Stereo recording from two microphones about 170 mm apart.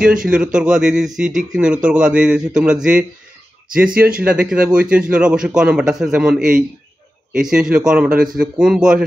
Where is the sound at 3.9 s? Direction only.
60° right (ahead or behind).